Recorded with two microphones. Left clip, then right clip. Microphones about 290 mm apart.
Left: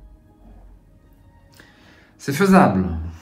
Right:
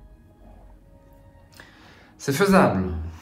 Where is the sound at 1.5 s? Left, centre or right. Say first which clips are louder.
Right 1 dB; centre.